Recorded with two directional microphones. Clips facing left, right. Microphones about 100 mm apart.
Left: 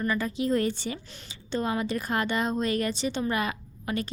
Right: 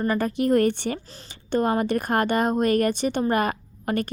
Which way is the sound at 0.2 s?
55° right (ahead or behind).